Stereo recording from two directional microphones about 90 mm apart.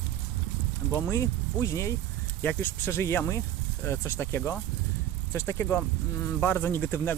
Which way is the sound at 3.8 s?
30° left (ahead or behind).